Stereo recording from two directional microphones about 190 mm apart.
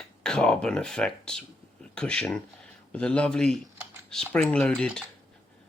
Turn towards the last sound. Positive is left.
turn(degrees=5)  # may be behind; listen again after turning